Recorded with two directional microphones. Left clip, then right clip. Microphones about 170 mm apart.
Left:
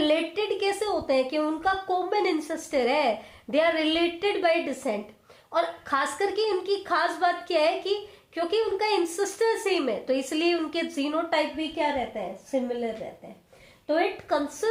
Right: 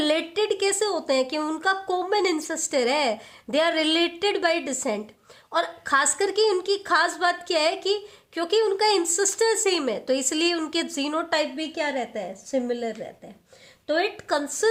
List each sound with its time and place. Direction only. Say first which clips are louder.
0.0 s speech: right 1 dB; 30° right (ahead or behind)
13.8 s speech: right 1 dB; 35° right (ahead or behind)